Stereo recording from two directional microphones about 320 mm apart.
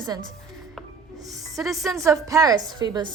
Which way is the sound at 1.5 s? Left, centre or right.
Centre.